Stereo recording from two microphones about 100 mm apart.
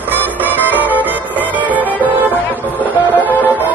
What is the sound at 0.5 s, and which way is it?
Music, 15° left (ahead or behind).